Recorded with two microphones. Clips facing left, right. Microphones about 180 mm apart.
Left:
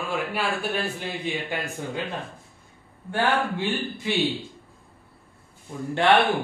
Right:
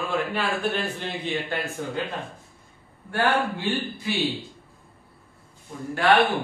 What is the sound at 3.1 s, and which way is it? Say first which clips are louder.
Speech: even; 20° left (ahead or behind).